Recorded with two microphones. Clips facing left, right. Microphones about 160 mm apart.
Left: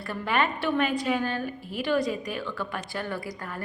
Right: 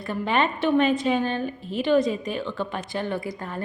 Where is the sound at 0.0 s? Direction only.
20° right (ahead or behind).